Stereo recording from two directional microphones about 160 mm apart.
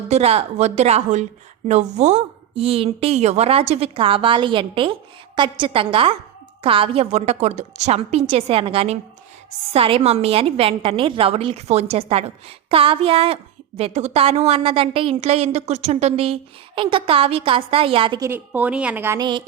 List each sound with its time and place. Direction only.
0.1 s a woman's voice: 40° right (ahead or behind)
18.2 s a woman's voice: 15° right (ahead or behind)